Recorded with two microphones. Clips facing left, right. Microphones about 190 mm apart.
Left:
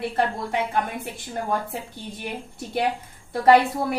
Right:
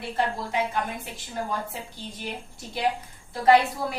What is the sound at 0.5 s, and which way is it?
Speech, 55° left (ahead or behind).